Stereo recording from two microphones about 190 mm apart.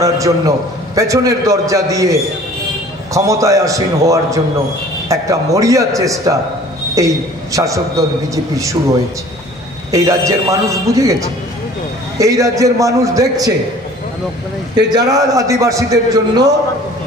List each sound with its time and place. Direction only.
0.0 s a man's voice: 15° right (ahead or behind)
9.8 s a man's voice: 15° right (ahead or behind)
14.9 s a man's voice: 20° right (ahead or behind)